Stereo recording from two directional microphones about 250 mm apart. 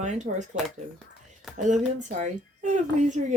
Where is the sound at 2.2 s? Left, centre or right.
Right.